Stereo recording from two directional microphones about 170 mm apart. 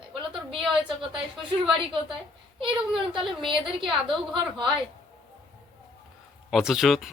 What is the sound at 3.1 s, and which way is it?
Speech, 30° right (ahead or behind).